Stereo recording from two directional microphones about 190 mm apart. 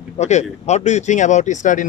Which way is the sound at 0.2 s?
35° left (ahead or behind).